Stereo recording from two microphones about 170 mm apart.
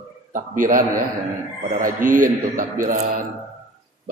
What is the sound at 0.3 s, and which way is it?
A man's voice, 50° right (ahead or behind).